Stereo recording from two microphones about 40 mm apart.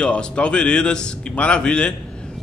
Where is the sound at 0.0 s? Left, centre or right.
Left.